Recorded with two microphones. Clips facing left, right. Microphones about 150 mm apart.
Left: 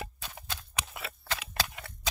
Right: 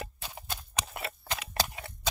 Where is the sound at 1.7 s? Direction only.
25° right (ahead or behind).